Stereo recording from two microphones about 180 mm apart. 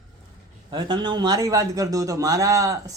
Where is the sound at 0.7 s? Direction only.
25° right (ahead or behind).